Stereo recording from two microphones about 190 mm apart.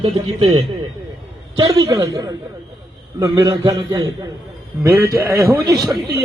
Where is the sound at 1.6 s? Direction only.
20° right (ahead or behind).